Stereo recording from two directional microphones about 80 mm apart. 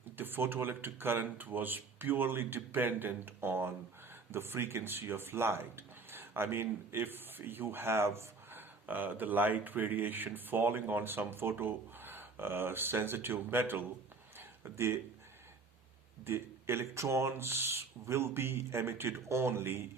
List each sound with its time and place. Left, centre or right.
0.2 s speech: right
14.3 s a sound: right
16.2 s speech: right